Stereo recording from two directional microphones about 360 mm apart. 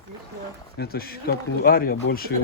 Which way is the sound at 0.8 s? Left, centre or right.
Left.